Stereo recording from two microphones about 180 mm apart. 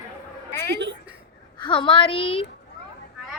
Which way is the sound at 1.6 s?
25° left (ahead or behind).